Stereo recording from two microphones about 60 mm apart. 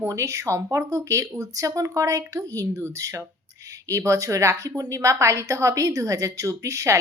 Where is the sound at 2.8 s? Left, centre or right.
Right.